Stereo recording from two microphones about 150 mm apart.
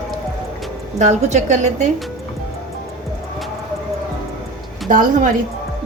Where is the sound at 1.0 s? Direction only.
50° right (ahead or behind).